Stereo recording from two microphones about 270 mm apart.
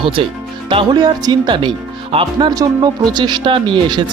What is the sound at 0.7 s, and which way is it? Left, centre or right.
Speech, centre.